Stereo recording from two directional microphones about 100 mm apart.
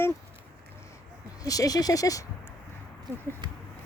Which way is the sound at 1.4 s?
35° left (ahead or behind).